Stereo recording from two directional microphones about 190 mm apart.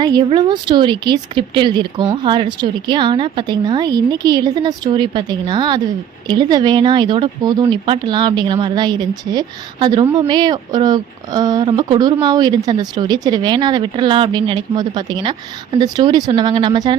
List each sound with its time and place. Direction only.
0.0 s speech: 20° right (ahead or behind)